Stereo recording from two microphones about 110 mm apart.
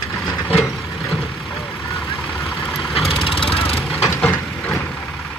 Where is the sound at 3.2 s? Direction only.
55° left (ahead or behind).